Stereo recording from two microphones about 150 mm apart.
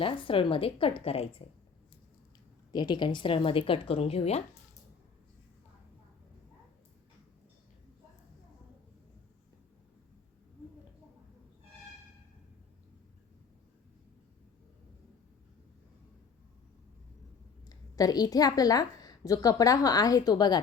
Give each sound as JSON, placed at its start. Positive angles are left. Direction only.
{"t": 0.0, "sound": "speech", "side_deg": 35}
{"t": 2.7, "sound": "speech", "side_deg": 30}
{"t": 17.7, "sound": "a woman's voice", "side_deg": 25}